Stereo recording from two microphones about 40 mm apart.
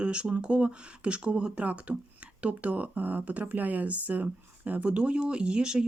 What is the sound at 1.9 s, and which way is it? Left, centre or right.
Speech, right.